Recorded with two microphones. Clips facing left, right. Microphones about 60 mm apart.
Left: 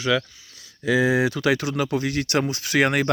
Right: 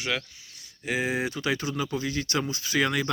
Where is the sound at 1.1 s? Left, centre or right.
Left.